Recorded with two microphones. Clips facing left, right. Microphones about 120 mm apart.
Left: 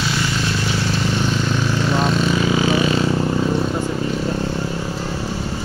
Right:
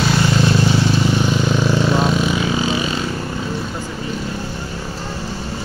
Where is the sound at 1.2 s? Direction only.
10° right (ahead or behind).